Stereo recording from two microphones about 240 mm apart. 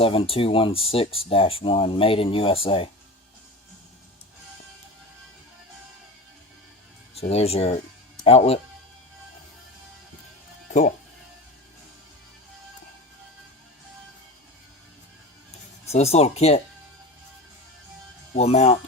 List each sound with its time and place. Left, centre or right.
0.0 s speech: left
7.2 s speech: left
15.9 s speech: left
18.3 s speech: left